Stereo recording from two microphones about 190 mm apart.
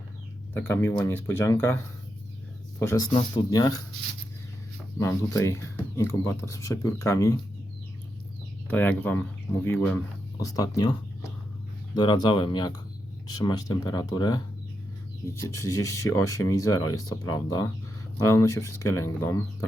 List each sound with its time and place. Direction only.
0.5 s speech: 10° left (ahead or behind)
4.9 s speech: 15° left (ahead or behind)
8.6 s speech: 10° left (ahead or behind)